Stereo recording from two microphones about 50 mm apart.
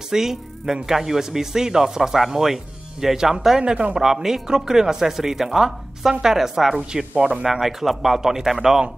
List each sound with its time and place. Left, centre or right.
0.1 s speech: centre
6.9 s speech: centre
7.4 s a man's voice: centre